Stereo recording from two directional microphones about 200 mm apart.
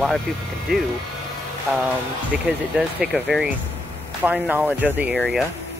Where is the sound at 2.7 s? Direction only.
Centre (ahead or behind).